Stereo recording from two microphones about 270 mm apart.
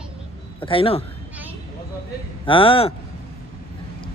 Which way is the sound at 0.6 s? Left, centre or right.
Centre.